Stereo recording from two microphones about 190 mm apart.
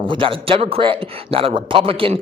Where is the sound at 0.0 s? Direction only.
25° right (ahead or behind).